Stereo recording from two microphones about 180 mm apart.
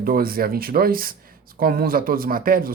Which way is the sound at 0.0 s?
55° right (ahead or behind).